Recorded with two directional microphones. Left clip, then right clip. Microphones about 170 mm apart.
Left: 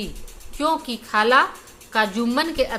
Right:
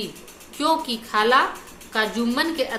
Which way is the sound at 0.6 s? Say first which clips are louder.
Right 1 dB; 25° left (ahead or behind).